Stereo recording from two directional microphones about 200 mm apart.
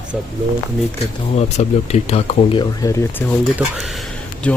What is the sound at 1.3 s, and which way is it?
Speech, 35° left (ahead or behind).